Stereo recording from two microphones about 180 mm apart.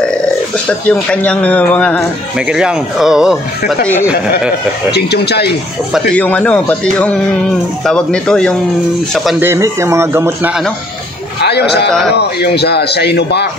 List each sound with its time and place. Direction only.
0.7 s speech: 5° left (ahead or behind)
2.3 s speech: 5° right (ahead or behind)
3.8 s speech: 10° left (ahead or behind)
4.9 s speech: 65° left (ahead or behind)
6.1 s speech: 10° left (ahead or behind)
9.4 s speech: 15° right (ahead or behind)
11.4 s a man's voice: 65° left (ahead or behind)